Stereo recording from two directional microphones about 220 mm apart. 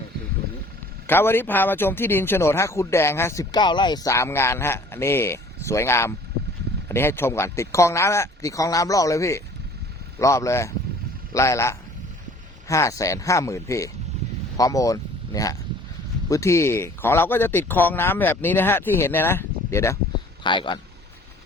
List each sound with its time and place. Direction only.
1.0 s a man's voice: 10° left (ahead or behind)